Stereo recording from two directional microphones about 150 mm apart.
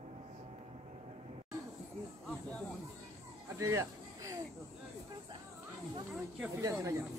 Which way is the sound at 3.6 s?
20° right (ahead or behind).